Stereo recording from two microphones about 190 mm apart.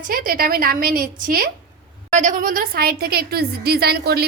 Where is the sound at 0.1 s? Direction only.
50° right (ahead or behind).